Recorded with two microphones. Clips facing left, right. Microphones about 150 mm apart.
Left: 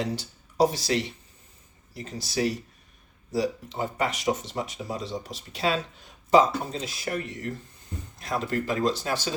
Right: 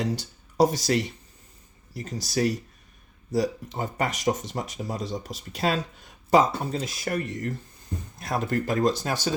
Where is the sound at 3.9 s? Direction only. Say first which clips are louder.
Right 1 dB; 45° right (ahead or behind).